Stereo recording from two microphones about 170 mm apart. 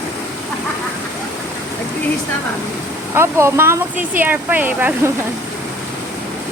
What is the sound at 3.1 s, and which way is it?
Speech, 15° right (ahead or behind).